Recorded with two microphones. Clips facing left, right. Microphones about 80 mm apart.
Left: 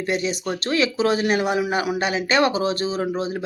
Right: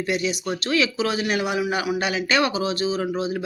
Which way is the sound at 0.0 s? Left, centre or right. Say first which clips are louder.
Left 1 dB; left.